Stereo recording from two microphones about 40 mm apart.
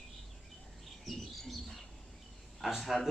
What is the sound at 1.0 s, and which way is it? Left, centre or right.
Bird, centre.